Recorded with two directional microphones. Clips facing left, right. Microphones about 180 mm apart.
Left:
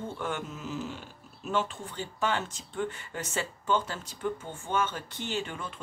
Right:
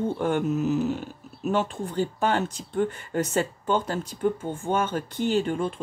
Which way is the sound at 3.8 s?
55° right (ahead or behind).